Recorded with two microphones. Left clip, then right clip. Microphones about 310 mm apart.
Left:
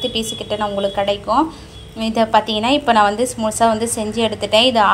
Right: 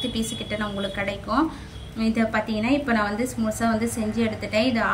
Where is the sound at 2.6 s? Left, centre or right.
Left.